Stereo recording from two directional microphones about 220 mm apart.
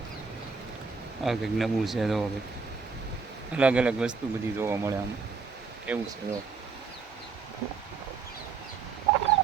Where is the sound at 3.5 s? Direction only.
5° right (ahead or behind).